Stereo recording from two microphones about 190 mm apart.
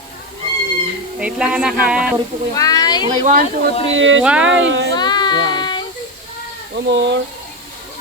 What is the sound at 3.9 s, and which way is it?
Speech, 90° right.